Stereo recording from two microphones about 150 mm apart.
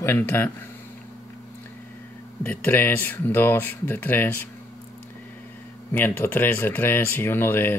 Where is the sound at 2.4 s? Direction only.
15° left (ahead or behind).